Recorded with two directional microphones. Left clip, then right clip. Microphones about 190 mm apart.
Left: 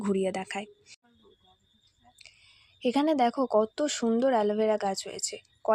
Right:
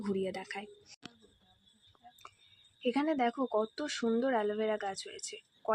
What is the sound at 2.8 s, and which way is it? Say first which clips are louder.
A woman's voice: left 6 dB; 35° left (ahead or behind).